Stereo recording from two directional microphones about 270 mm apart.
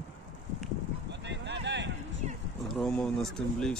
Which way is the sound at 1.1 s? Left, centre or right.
Right.